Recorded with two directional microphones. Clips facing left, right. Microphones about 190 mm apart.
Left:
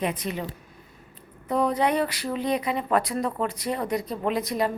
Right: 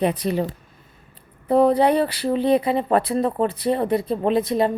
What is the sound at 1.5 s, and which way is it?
Speech, 30° right (ahead or behind).